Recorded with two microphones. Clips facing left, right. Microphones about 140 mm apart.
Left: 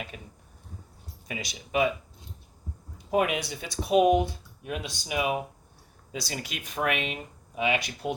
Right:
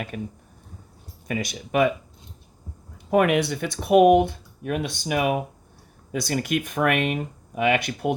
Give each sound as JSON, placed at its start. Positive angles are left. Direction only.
{"t": 0.1, "sound": "speech", "side_deg": -50}
{"t": 1.3, "sound": "speech", "side_deg": -50}
{"t": 3.1, "sound": "speech", "side_deg": -60}